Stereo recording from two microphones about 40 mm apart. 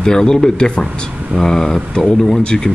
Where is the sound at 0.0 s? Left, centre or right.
Centre.